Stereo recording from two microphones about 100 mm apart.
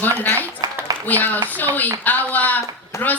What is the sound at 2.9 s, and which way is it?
Speech, 30° left (ahead or behind).